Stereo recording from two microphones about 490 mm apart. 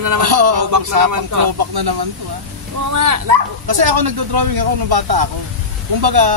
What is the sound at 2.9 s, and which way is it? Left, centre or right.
Speech, right.